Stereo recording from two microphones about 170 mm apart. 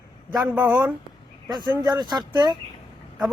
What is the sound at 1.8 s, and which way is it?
Speech, 25° right (ahead or behind).